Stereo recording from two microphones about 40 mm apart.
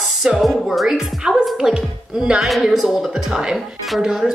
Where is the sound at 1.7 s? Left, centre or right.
Right.